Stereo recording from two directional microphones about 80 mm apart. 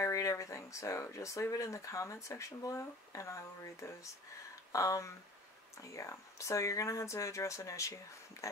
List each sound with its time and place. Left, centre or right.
0.0 s speech: left